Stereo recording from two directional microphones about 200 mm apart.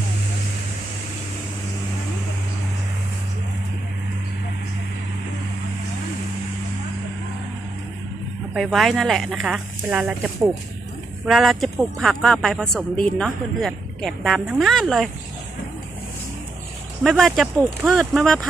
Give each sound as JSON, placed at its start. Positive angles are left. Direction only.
{"t": 8.5, "sound": "speech", "side_deg": 0}
{"t": 17.0, "sound": "speech", "side_deg": 0}